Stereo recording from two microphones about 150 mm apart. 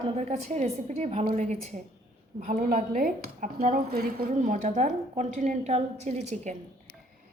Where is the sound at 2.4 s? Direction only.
60° right (ahead or behind).